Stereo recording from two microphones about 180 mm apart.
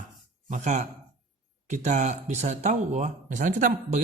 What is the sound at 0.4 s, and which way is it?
Speech, 40° right (ahead or behind).